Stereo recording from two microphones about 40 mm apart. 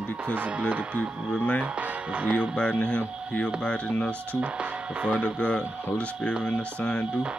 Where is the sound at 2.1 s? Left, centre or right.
Right.